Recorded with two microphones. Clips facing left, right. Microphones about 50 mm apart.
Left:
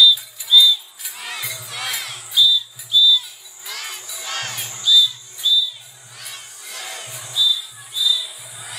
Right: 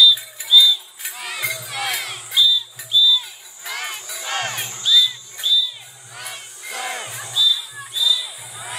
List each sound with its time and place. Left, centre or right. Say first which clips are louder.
0.5 s a sound: even; centre
1.1 s music: even; centre
1.4 s crowd: right 5 dB; right
1.7 s crowd: right 3 dB; centre
2.3 s music: left 1 dB; right
3.6 s crowd: right 4 dB; centre
4.2 s battle cry: right 4 dB; centre
4.8 s music: left 1 dB; right
6.1 s crowd: right 3 dB; right
6.8 s crowd: right 6 dB; right
7.3 s music: right 1 dB; right